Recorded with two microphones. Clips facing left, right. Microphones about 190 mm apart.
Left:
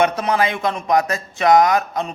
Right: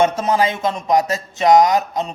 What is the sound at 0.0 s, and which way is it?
Speech, 25° right (ahead or behind).